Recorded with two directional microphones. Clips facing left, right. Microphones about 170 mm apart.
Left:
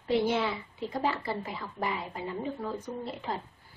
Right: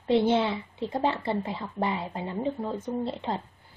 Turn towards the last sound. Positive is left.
turn(degrees=-25)  # may be behind; listen again after turning